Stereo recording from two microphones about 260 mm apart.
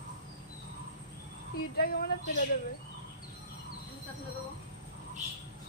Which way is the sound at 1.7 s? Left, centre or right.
Left.